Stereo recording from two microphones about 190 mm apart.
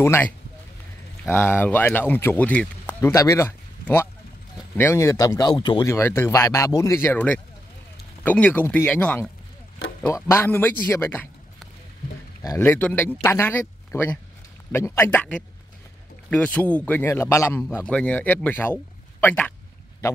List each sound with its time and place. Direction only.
0.0 s speech: 15° left (ahead or behind)
1.3 s speech: 10° left (ahead or behind)
5.9 s speech: 15° left (ahead or behind)
10.9 s a sound: 10° left (ahead or behind)
12.4 s speech: 15° left (ahead or behind)